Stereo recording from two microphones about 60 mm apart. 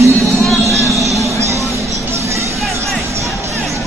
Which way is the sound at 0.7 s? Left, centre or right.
Right.